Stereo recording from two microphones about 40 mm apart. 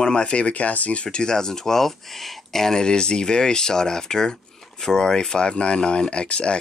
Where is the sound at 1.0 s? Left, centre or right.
Centre.